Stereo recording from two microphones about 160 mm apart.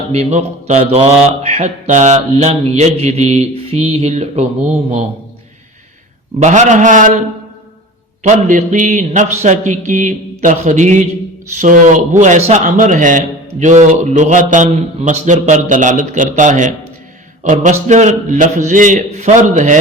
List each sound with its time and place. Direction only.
0.1 s speech: 45° right (ahead or behind)
6.4 s speech: 50° right (ahead or behind)
8.3 s speech: 55° right (ahead or behind)